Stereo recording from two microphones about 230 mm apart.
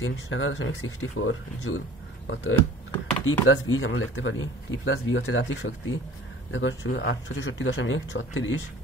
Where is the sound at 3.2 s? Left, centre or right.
Left.